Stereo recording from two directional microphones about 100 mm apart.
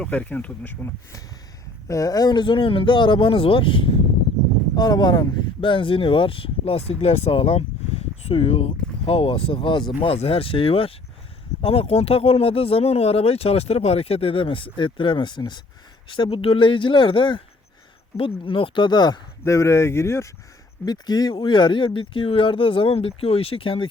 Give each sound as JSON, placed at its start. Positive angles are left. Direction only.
{"t": 0.0, "sound": "speech", "side_deg": 15}
{"t": 1.9, "sound": "speech", "side_deg": 35}
{"t": 4.7, "sound": "speech", "side_deg": 45}
{"t": 5.5, "sound": "speech", "side_deg": 55}
{"t": 10.0, "sound": "speech", "side_deg": 75}
{"t": 19.5, "sound": "speech", "side_deg": 30}
{"t": 20.8, "sound": "speech", "side_deg": 40}